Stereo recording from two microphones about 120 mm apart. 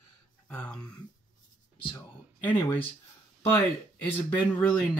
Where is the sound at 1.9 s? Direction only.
15° left (ahead or behind).